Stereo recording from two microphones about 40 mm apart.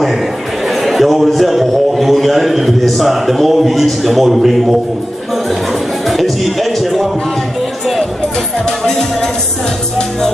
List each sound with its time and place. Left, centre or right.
0.7 s a sound: centre
2.8 s a man's voice: centre
5.5 s music: centre
8.6 s music: centre